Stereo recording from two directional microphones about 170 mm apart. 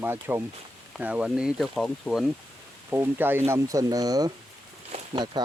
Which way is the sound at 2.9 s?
10° right (ahead or behind).